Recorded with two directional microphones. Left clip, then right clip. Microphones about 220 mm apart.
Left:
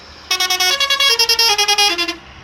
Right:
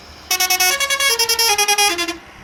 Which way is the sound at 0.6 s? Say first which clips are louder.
Left 2 dB; 15° right (ahead or behind).